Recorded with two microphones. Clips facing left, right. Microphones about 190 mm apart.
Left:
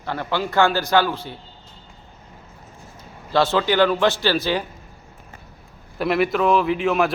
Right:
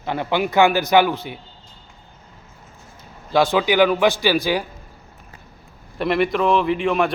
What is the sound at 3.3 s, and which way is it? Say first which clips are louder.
A man's voice: right 2 dB; 15° right (ahead or behind).